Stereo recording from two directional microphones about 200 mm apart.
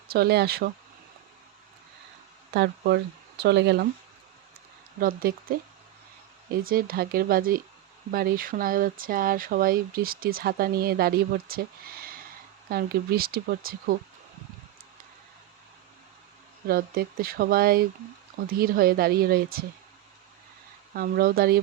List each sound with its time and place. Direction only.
0.1 s speech: 55° right (ahead or behind)
2.5 s speech: 55° right (ahead or behind)
4.9 s speech: 45° right (ahead or behind)
12.6 s speech: 50° right (ahead or behind)
16.6 s speech: 50° right (ahead or behind)
20.9 s speech: 50° right (ahead or behind)